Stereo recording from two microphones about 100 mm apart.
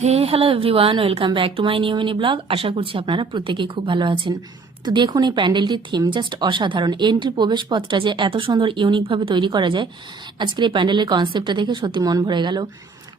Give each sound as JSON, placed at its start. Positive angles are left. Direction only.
{"t": 0.0, "sound": "a woman's voice", "side_deg": -85}